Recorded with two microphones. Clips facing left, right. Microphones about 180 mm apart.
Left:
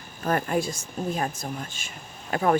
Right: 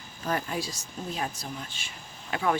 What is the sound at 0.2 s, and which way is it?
Speech, 55° left (ahead or behind).